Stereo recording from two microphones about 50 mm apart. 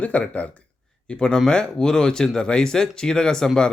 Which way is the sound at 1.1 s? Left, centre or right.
Centre.